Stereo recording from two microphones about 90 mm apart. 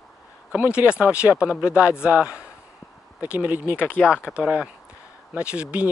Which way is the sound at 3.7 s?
20° left (ahead or behind).